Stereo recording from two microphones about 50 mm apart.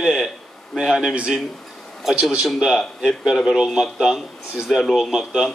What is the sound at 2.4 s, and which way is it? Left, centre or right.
A man's voice, centre.